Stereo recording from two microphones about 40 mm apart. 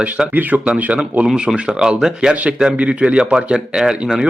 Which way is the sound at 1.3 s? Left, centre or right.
Right.